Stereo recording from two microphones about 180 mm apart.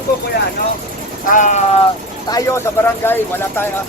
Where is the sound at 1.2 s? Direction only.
45° left (ahead or behind).